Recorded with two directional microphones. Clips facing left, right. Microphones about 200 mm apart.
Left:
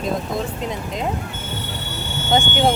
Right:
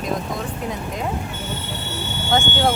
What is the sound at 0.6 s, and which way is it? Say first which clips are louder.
Speech: left 1 dB; 20° left (ahead or behind).